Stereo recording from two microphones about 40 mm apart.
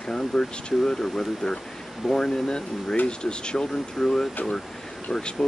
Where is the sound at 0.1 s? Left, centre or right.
Centre.